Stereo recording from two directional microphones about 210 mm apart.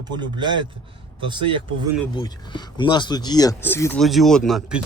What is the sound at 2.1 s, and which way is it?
Speech, 20° left (ahead or behind).